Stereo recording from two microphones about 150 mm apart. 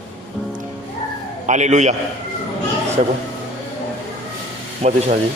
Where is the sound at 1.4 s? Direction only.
50° right (ahead or behind).